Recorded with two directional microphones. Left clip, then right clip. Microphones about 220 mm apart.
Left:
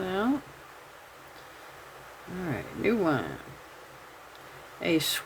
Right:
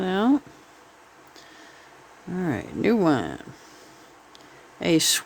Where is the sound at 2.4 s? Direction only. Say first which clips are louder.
Right 5 dB; 50° right (ahead or behind).